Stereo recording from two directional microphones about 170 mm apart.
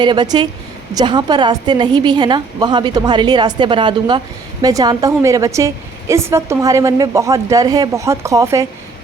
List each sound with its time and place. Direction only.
0.0 s a woman's voice: 25° right (ahead or behind)